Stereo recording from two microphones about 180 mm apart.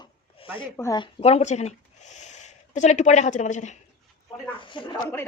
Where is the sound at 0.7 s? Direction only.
15° left (ahead or behind).